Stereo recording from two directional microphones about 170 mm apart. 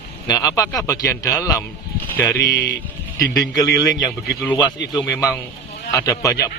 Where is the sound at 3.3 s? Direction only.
20° left (ahead or behind).